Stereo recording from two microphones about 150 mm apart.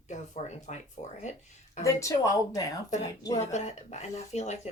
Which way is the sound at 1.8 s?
20° left (ahead or behind).